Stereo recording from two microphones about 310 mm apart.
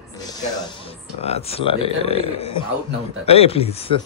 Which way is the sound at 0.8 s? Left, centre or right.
Centre.